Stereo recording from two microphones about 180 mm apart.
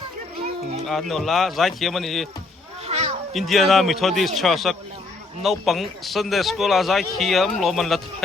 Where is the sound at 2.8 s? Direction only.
35° right (ahead or behind).